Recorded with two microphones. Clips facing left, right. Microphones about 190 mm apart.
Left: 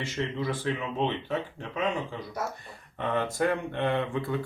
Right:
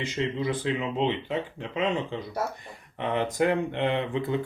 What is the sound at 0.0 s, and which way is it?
Speech, 15° right (ahead or behind).